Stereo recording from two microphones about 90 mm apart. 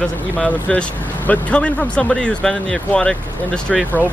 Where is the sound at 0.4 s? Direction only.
10° left (ahead or behind).